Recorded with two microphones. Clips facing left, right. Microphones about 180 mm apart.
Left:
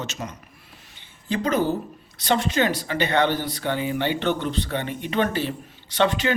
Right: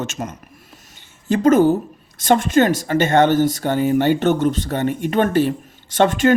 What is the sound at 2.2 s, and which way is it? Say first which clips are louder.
Speech: right 7 dB; 50° right (ahead or behind).